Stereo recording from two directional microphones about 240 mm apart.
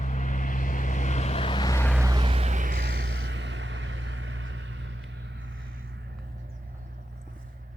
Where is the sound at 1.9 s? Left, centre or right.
Centre; by 6.3 s right.